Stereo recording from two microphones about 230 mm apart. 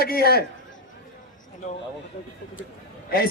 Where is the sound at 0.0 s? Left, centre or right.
Left.